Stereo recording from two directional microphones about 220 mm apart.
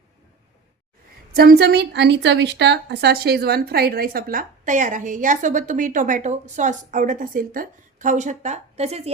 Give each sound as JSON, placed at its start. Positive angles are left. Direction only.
{"t": 1.3, "sound": "a woman's voice", "side_deg": -45}